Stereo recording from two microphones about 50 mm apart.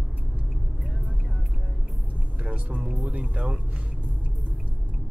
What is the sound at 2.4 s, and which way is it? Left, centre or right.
Speech, right.